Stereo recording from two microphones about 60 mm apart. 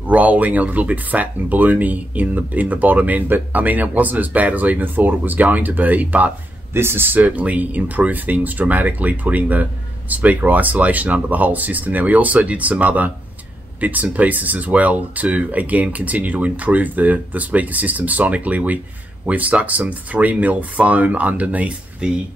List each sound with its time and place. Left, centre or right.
0.0 s speech: right
6.7 s speech: right; by 22.2 s centre